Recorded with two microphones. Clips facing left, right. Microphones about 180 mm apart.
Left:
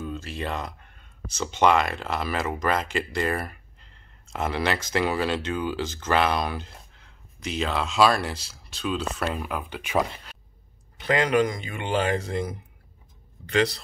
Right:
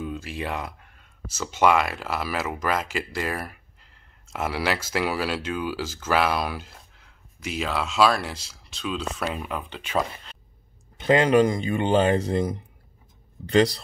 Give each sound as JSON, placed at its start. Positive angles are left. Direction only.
{"t": 0.0, "sound": "speech", "side_deg": -10}
{"t": 11.1, "sound": "speech", "side_deg": -30}